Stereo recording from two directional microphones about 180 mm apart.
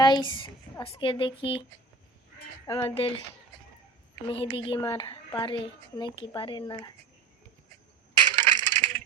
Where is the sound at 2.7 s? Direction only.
30° left (ahead or behind).